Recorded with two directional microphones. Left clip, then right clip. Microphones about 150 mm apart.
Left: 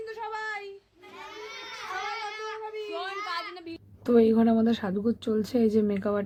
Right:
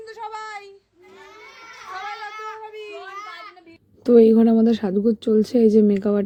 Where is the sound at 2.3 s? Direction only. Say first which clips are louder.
Right 3 dB; 90° right.